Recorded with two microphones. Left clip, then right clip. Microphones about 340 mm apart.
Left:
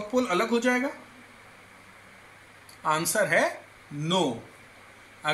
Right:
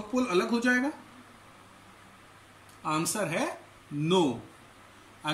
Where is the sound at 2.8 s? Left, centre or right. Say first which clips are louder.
Left 5 dB; centre.